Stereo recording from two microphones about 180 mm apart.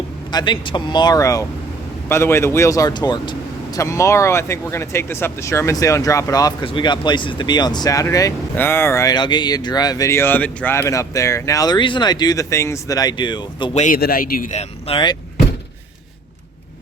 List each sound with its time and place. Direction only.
0.3 s speech: 25° left (ahead or behind)
13.7 s speech: 45° left (ahead or behind)
14.0 s speech: 55° left (ahead or behind); by 15.2 s 25° left (ahead or behind)